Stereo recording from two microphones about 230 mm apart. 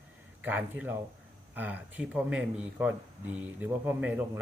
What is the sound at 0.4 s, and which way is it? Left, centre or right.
Speech, centre.